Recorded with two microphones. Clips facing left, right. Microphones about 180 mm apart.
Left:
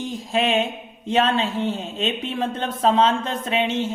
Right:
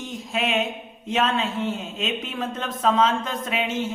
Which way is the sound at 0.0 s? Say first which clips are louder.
Left 4 dB; 30° left (ahead or behind).